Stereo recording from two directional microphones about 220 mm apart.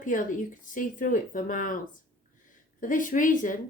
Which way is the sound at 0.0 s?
35° left (ahead or behind).